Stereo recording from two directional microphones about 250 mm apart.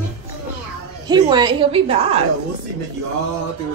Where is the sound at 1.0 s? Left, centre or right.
Centre.